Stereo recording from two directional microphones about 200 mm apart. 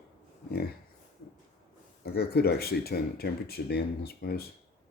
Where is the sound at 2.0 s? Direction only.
50° left (ahead or behind).